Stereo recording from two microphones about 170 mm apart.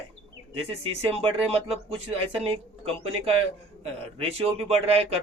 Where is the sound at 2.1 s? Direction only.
35° right (ahead or behind).